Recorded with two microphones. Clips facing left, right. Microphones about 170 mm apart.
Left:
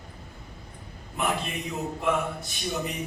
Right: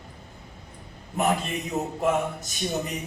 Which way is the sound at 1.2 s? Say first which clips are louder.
Right 4 dB; 45° right (ahead or behind).